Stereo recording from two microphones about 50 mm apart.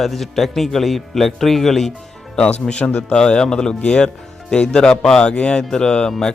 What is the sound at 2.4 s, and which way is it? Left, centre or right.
Speech, left.